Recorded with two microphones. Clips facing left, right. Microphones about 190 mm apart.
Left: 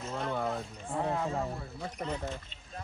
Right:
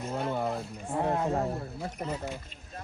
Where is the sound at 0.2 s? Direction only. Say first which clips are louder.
Right 2 dB; 5° right (ahead or behind).